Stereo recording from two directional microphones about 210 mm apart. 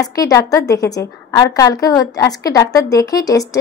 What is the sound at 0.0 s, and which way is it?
A woman's voice, 15° left (ahead or behind).